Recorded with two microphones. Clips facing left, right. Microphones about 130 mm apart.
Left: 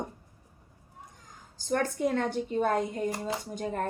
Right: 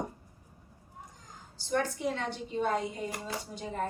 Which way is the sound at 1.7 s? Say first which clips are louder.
Left 3 dB; 50° left (ahead or behind).